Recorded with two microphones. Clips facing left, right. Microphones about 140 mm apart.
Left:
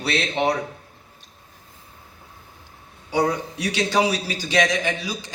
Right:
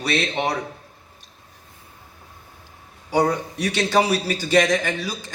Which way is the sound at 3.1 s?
45° right (ahead or behind).